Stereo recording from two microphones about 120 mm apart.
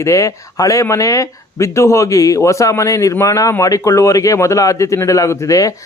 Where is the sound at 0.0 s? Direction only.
25° left (ahead or behind).